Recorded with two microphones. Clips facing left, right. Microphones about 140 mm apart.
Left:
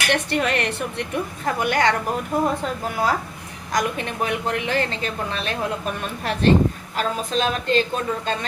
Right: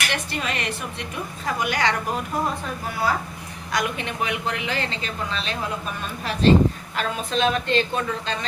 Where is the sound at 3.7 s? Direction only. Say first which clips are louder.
Left 2 dB; 45° left (ahead or behind); by 6.5 s 60° left (ahead or behind).